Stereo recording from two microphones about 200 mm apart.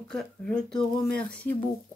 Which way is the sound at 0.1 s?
5° left (ahead or behind).